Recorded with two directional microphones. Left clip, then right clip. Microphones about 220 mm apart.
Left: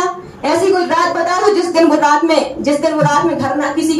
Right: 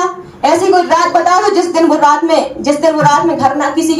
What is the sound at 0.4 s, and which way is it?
A woman's voice, 25° right (ahead or behind).